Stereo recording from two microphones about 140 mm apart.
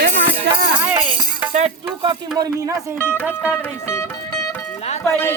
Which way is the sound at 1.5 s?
50° right (ahead or behind).